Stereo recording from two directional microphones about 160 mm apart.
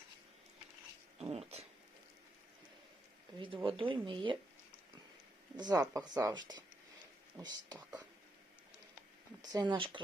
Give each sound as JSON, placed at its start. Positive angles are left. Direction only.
{"t": 1.2, "sound": "a sound", "side_deg": -40}
{"t": 3.3, "sound": "speech", "side_deg": -30}
{"t": 5.5, "sound": "speech", "side_deg": -25}
{"t": 5.8, "sound": "speech", "side_deg": -10}
{"t": 6.1, "sound": "speech", "side_deg": -25}
{"t": 9.4, "sound": "speech", "side_deg": -25}